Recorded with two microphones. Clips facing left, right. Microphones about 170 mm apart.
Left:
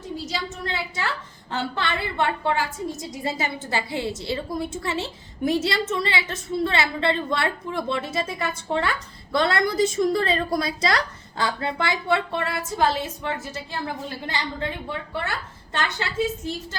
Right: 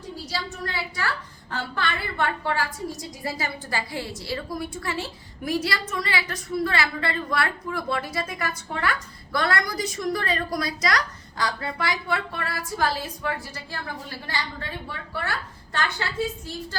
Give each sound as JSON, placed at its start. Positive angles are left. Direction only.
{"t": 0.3, "sound": "a woman's voice", "side_deg": 20}